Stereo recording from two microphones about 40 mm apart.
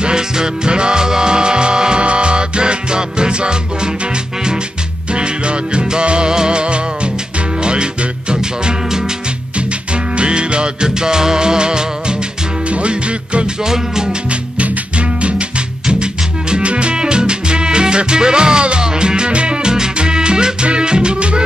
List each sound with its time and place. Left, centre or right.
0.0 s music: right
5.1 s music: right
10.1 s music: right
13.7 s music: centre
14.3 s music: right